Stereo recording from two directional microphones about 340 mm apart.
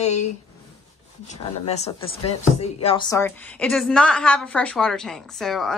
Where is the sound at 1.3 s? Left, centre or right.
Centre.